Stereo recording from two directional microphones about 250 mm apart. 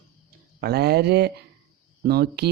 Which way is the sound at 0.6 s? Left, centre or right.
Right.